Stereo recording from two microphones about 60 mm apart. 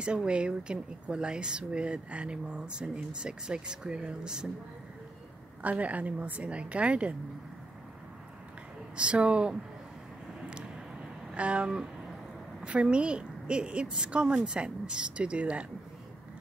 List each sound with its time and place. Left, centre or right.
0.0 s speech: centre
5.6 s a woman's voice: right
8.9 s a woman's voice: centre
10.4 s a sound: centre
11.3 s a woman's voice: right